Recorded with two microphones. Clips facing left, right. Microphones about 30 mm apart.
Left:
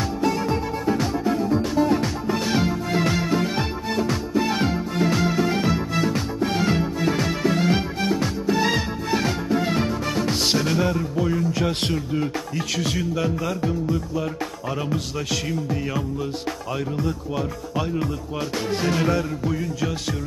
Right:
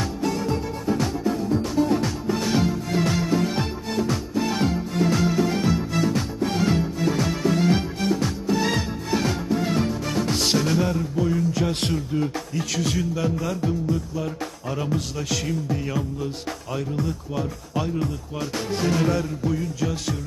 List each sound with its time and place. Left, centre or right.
0.2 s music: centre